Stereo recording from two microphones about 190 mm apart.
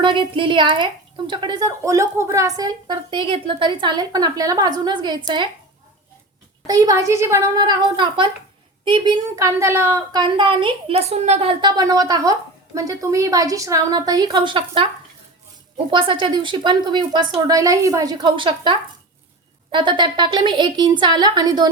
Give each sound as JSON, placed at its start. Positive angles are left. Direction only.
{"t": 0.0, "sound": "a woman's voice", "side_deg": -25}
{"t": 6.7, "sound": "a woman's voice", "side_deg": -20}
{"t": 15.9, "sound": "a woman's voice", "side_deg": -25}